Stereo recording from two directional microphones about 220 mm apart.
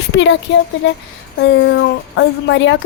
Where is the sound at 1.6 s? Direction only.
55° left (ahead or behind).